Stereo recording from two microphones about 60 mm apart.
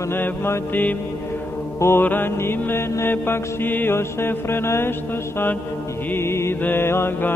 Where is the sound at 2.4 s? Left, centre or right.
Left.